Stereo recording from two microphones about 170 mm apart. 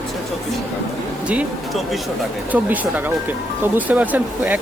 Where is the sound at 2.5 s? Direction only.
10° right (ahead or behind).